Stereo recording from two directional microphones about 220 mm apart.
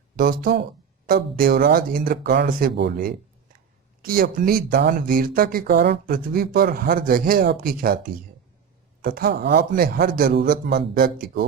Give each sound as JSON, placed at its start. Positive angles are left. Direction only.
{"t": 0.2, "sound": "a man's voice", "side_deg": -45}
{"t": 9.0, "sound": "a man's voice", "side_deg": -40}